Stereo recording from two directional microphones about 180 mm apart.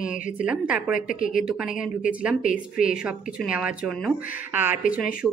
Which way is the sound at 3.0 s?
5° right (ahead or behind).